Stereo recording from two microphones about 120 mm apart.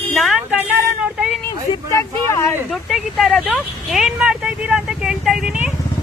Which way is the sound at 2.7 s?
Centre (ahead or behind).